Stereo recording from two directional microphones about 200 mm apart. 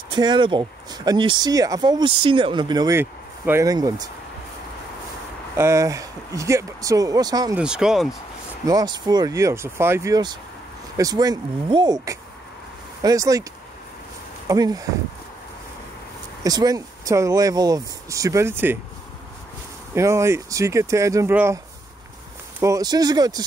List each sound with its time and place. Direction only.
0.1 s speech: 20° right (ahead or behind)
5.6 s speech: 15° right (ahead or behind)
7.5 s speech: 5° right (ahead or behind)
8.6 s speech: 20° right (ahead or behind)
14.5 s speech: 20° right (ahead or behind)
16.4 s speech: 20° right (ahead or behind)
19.9 s speech: 15° right (ahead or behind)
22.6 s speech: 15° right (ahead or behind)